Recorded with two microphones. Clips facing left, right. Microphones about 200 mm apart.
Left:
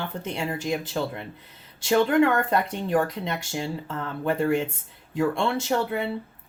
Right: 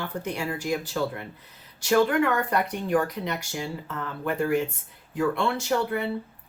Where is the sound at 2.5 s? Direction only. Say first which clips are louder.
Left 1 dB; 25° left (ahead or behind).